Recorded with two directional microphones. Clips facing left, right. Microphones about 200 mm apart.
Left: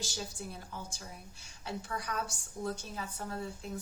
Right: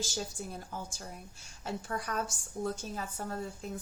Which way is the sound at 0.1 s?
50° right (ahead or behind).